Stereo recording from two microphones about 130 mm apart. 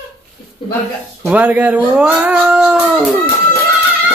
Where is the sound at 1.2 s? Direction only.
10° right (ahead or behind).